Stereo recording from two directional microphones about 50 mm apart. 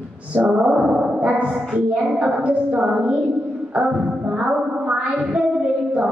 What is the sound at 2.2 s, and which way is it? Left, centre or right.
Child singing, right.